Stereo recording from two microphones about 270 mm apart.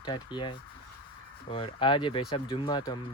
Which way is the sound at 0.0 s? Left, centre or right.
Centre.